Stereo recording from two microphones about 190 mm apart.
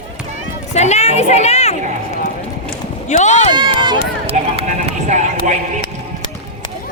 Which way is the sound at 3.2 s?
40° left (ahead or behind).